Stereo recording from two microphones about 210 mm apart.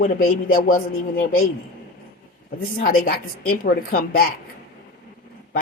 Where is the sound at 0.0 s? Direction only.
40° left (ahead or behind).